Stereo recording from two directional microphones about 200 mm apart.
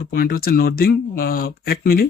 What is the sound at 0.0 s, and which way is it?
Speech, 45° left (ahead or behind).